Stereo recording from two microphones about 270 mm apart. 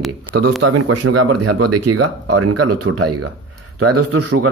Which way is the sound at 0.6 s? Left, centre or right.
Right.